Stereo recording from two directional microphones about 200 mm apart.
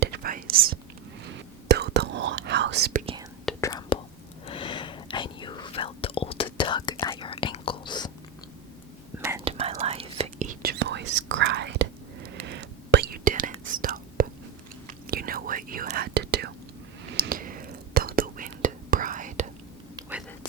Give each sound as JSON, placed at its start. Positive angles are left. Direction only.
{"t": 0.0, "sound": "whispering", "side_deg": -50}
{"t": 1.2, "sound": "whispering", "side_deg": -60}
{"t": 3.6, "sound": "whispering", "side_deg": 20}
{"t": 9.4, "sound": "whispering", "side_deg": -30}
{"t": 20.0, "sound": "whispering", "side_deg": -20}